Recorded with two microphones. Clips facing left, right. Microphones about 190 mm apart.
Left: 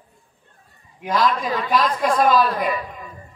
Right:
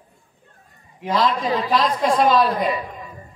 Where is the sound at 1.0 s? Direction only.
25° right (ahead or behind).